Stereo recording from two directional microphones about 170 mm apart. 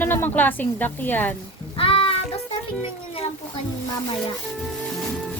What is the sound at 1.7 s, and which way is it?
Child singing, 30° left (ahead or behind).